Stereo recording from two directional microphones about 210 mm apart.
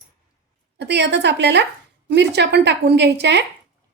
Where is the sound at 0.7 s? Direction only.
55° right (ahead or behind).